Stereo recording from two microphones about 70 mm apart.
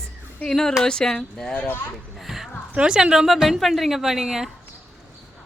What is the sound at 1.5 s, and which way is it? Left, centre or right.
Speech, left.